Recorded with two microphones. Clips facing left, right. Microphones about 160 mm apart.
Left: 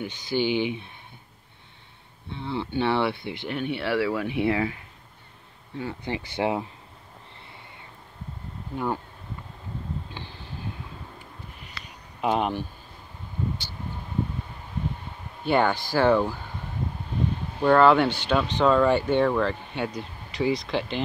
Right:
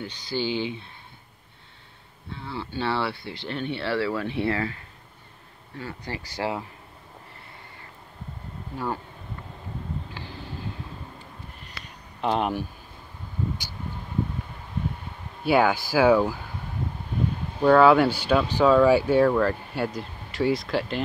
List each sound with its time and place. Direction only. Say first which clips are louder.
0.0 s speech: left 3 dB; 15° left (ahead or behind)
2.3 s speech: left 4 dB; 20° left (ahead or behind)
5.8 s speech: left 4 dB; 20° left (ahead or behind)
8.7 s speech: left 2 dB; 15° left (ahead or behind)
10.2 s vehicle: even; 20° left (ahead or behind)
12.2 s speech: even; 5° left (ahead or behind)
15.4 s speech: right 2 dB; 5° right (ahead or behind)
17.6 s speech: right 2 dB; 5° right (ahead or behind)